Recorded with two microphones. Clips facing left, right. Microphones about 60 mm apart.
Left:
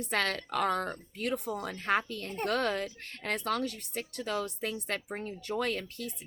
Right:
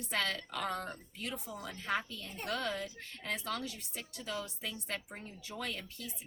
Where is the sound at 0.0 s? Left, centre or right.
Left.